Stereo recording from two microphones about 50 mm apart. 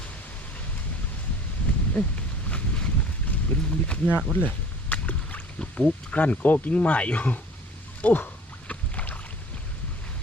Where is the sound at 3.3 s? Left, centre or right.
Left.